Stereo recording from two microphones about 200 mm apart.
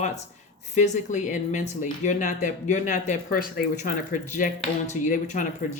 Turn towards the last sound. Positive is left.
turn(degrees=40)  # may be behind; listen again after turning